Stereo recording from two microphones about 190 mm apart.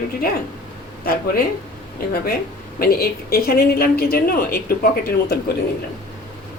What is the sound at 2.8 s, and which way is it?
Speech, 50° left (ahead or behind).